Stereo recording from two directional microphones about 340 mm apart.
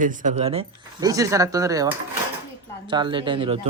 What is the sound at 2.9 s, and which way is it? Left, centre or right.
Speech, centre.